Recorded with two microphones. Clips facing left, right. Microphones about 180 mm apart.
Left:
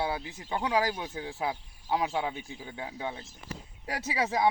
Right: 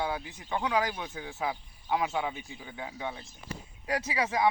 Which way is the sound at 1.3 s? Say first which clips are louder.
Right 1 dB; centre (ahead or behind).